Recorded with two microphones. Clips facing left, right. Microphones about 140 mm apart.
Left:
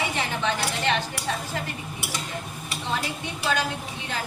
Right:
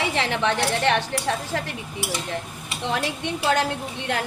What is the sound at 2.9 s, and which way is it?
A woman's voice, 70° right (ahead or behind).